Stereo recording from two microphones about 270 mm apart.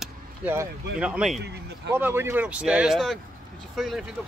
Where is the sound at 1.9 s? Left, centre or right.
Centre.